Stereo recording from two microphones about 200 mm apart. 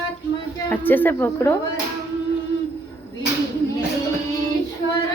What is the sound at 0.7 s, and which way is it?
Speech, 10° left (ahead or behind).